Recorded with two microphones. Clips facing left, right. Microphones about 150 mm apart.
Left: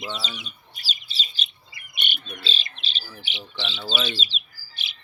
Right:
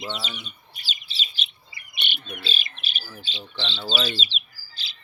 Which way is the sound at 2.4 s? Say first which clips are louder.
Even; 30° left (ahead or behind).